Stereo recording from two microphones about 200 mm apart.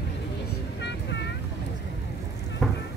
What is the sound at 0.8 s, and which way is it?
Vehicle, 60° left (ahead or behind).